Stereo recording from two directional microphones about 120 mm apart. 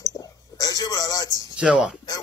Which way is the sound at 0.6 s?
30° left (ahead or behind).